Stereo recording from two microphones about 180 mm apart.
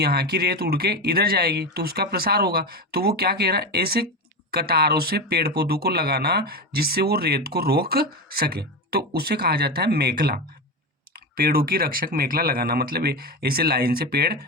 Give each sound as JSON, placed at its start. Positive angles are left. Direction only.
{"t": 0.0, "sound": "speech", "side_deg": -60}